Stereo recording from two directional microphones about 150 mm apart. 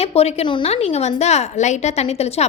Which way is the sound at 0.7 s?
45° left (ahead or behind).